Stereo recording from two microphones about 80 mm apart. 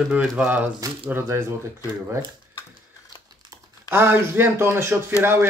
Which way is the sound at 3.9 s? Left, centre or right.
Right.